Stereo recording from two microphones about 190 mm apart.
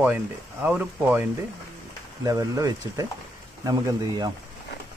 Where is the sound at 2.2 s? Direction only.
20° right (ahead or behind).